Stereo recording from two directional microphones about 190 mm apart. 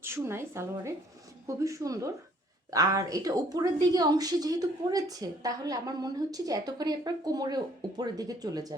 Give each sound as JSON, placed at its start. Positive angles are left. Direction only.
{"t": 0.0, "sound": "a woman's voice", "side_deg": -15}